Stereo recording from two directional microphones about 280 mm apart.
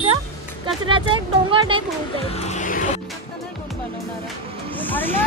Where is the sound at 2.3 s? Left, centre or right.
Left.